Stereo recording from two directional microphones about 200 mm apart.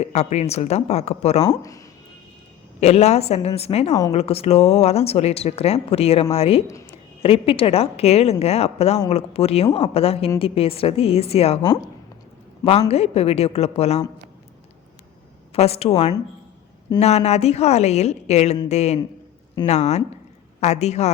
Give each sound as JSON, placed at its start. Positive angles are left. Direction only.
{"t": 0.0, "sound": "speech", "side_deg": 35}
{"t": 1.5, "sound": "speech", "side_deg": 15}
{"t": 2.8, "sound": "a woman's voice", "side_deg": 30}
{"t": 12.9, "sound": "speech", "side_deg": 30}
{"t": 15.5, "sound": "speech", "side_deg": 30}